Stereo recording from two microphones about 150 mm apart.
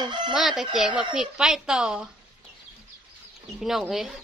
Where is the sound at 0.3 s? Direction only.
Centre (ahead or behind).